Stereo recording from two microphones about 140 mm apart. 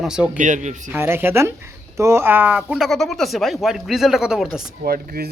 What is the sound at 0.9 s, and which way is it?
Speech, 15° right (ahead or behind).